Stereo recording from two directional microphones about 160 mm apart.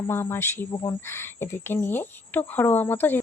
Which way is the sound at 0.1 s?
15° left (ahead or behind).